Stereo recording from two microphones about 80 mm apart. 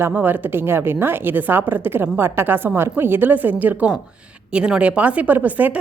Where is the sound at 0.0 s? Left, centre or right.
Right.